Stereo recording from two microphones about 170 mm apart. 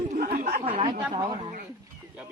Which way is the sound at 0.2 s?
65° right (ahead or behind).